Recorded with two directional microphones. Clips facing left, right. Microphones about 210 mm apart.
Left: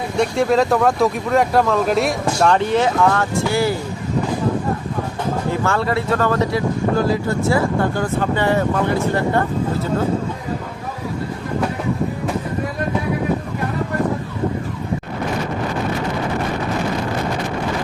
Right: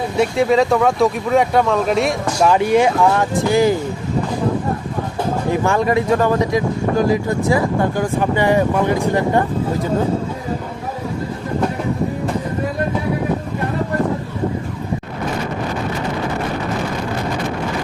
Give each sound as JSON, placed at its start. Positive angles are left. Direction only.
{"t": 0.2, "sound": "speech", "side_deg": 0}
{"t": 5.5, "sound": "speech", "side_deg": -15}